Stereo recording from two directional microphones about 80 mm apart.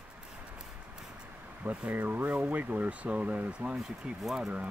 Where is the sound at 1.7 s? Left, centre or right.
Right.